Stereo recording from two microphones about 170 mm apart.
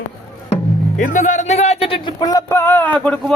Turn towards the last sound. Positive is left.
turn(degrees=10)  # may be behind; listen again after turning